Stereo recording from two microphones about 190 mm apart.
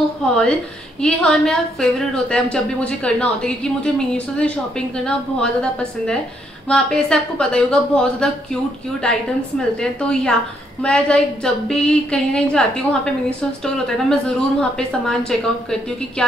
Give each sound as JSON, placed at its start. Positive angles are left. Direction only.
{"t": 0.2, "sound": "a woman's voice", "side_deg": 5}
{"t": 9.8, "sound": "a woman's voice", "side_deg": 5}